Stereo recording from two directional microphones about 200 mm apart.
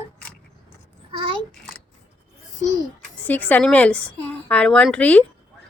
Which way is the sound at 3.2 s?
10° left (ahead or behind).